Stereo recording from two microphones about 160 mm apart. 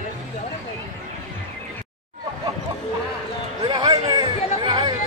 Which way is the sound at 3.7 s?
25° right (ahead or behind).